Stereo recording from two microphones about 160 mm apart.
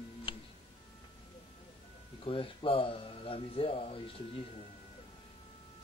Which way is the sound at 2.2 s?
35° left (ahead or behind).